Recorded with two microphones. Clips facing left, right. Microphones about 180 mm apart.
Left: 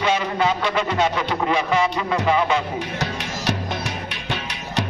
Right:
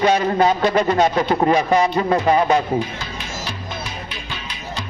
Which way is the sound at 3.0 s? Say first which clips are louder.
Left 3 dB; 75° left (ahead or behind).